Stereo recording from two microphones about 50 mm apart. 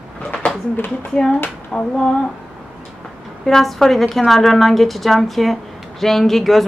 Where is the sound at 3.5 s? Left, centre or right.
Centre.